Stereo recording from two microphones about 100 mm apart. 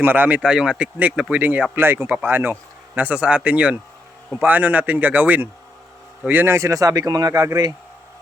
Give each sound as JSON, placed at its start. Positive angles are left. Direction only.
{"t": 0.0, "sound": "speech", "side_deg": -20}